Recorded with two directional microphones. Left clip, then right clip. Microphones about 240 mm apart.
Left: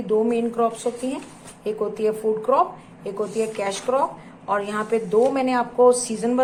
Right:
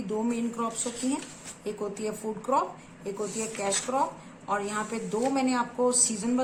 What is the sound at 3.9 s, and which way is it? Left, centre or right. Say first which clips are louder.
A woman's voice: left 7 dB; centre.